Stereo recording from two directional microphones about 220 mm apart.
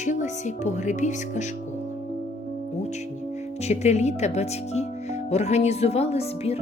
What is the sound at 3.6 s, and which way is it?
Speech, 30° left (ahead or behind).